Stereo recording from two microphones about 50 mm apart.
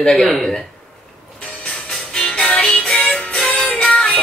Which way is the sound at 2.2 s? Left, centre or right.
Left.